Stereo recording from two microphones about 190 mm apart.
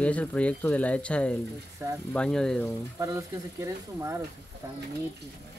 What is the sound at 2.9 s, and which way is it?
Speech, 15° right (ahead or behind).